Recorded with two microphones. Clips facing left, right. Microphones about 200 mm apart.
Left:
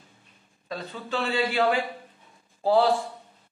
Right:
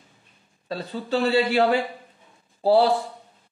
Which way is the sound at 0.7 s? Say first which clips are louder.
Right 5 dB; 35° right (ahead or behind).